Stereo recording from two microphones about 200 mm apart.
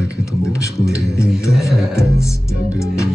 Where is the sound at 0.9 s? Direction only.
15° left (ahead or behind).